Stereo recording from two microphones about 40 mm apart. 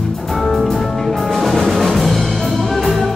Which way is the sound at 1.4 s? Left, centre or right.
Centre.